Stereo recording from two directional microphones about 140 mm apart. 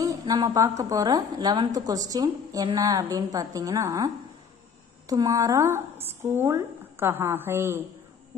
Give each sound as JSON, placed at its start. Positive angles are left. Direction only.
{"t": 0.0, "sound": "a woman's voice", "side_deg": -25}